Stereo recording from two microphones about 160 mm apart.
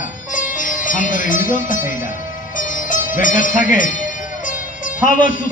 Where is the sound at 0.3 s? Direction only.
55° left (ahead or behind).